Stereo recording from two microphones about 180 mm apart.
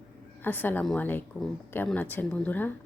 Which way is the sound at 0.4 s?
10° left (ahead or behind).